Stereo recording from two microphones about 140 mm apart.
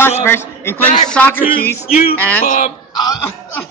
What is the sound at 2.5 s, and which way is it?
Speech, 65° left (ahead or behind).